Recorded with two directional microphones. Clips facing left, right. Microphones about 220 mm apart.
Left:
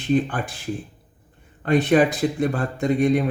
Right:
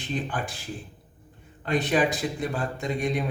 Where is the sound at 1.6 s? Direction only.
55° left (ahead or behind).